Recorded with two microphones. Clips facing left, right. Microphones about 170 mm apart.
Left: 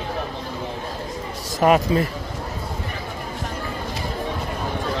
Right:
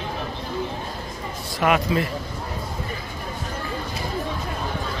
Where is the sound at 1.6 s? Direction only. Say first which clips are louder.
Left 4 dB; 35° left (ahead or behind).